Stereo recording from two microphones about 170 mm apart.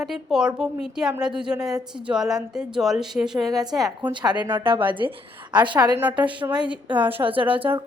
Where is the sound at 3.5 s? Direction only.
20° right (ahead or behind).